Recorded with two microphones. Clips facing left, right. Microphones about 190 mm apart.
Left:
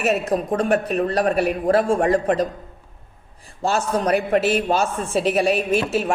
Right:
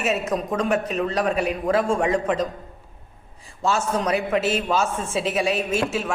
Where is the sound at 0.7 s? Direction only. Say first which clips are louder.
Left 4 dB; 55° left (ahead or behind).